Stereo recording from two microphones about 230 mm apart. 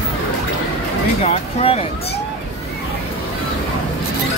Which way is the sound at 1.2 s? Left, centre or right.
Left.